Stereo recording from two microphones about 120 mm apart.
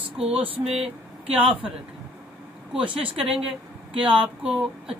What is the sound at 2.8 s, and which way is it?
Speech, 45° right (ahead or behind).